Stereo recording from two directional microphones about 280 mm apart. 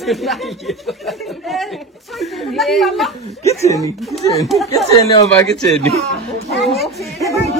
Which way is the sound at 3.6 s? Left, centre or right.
Centre.